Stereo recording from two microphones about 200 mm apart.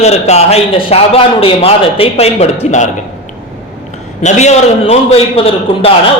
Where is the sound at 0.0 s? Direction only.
35° left (ahead or behind).